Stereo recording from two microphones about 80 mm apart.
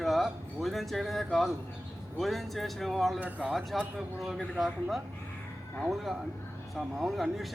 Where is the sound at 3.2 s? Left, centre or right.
Right.